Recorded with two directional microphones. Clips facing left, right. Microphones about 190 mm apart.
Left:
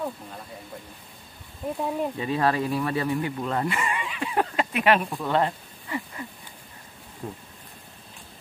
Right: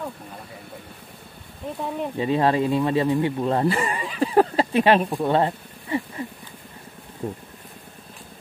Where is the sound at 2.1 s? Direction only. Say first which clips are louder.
Right 7 dB; 25° right (ahead or behind).